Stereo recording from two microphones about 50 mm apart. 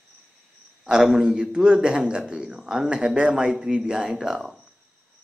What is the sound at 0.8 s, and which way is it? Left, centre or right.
A man's voice, centre.